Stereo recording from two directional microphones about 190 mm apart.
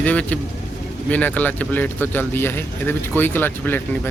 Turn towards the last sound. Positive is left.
turn(degrees=10)  # may be behind; listen again after turning